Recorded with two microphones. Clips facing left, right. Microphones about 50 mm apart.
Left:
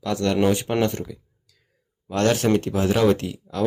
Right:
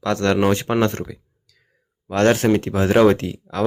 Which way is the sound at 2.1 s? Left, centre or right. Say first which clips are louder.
Right 3 dB; right.